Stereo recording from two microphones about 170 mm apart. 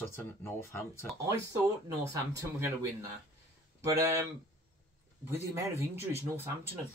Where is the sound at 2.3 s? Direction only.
15° right (ahead or behind).